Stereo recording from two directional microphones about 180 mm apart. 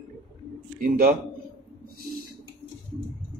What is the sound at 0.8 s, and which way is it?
Speech, 50° right (ahead or behind).